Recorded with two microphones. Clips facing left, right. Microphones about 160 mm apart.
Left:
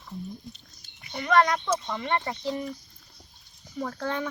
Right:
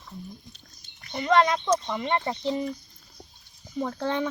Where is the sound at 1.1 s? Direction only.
20° right (ahead or behind).